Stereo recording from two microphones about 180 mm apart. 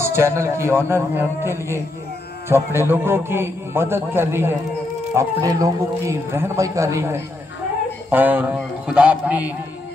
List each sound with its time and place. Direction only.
0.0 s a man's voice: 15° right (ahead or behind)